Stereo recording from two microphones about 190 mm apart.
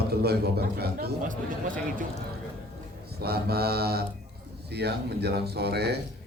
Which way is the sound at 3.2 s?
55° right (ahead or behind).